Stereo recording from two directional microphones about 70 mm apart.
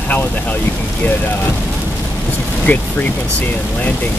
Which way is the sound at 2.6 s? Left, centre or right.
Left.